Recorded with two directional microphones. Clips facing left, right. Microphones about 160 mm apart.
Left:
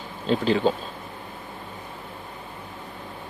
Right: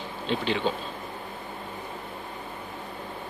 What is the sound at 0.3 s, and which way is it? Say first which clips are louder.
Speech: left 5 dB; 40° left (ahead or behind).